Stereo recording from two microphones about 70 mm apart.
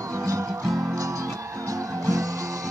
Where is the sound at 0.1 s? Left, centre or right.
Right.